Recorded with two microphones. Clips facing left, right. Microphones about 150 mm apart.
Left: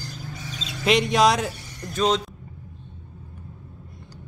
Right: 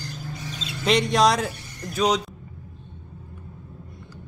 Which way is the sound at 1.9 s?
10° right (ahead or behind).